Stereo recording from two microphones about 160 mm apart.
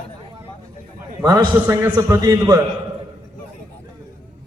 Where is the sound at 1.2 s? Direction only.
25° right (ahead or behind).